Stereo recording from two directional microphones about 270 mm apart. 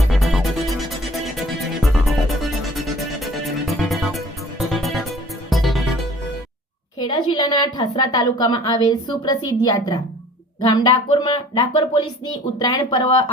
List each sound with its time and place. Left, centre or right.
0.0 s music: centre
7.0 s a woman's voice: centre